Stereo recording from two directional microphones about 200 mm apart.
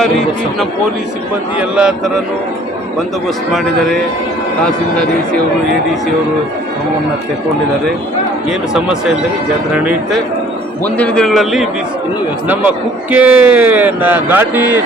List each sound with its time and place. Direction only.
1.5 s a man's voice: 5° right (ahead or behind)
8.4 s a man's voice: 5° right (ahead or behind)
10.8 s a man's voice: 5° left (ahead or behind); by 14.8 s 10° right (ahead or behind)